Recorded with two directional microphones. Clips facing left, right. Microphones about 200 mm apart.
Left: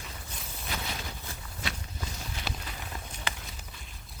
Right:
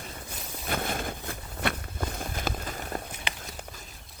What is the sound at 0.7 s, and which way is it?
Walk, 50° right (ahead or behind).